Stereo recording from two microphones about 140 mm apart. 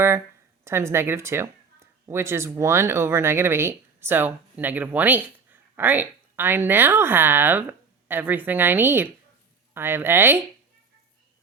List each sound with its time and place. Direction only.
0.6 s speech: 20° right (ahead or behind)